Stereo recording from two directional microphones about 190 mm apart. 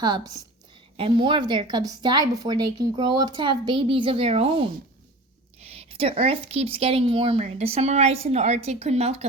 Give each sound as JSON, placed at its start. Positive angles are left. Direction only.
{"t": 0.0, "sound": "a woman's voice", "side_deg": -20}